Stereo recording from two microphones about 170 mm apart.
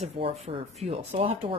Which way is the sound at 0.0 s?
35° right (ahead or behind).